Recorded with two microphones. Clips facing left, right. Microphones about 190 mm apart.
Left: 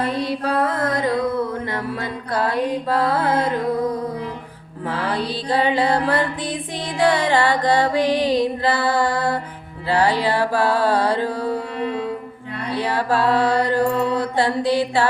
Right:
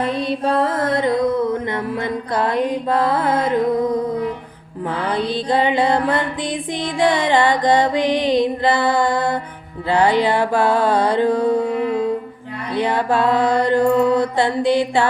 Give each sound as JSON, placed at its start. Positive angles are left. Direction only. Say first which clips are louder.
{"t": 0.2, "sound": "music", "louder": "right 2 dB", "side_deg": -25}
{"t": 4.9, "sound": "music", "louder": "right 2 dB", "side_deg": -20}
{"t": 12.7, "sound": "music", "louder": "right 3 dB", "side_deg": -20}